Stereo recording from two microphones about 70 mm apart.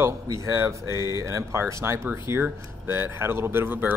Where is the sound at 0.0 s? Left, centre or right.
Right.